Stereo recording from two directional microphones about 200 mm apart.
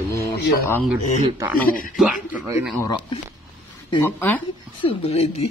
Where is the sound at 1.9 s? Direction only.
5° right (ahead or behind).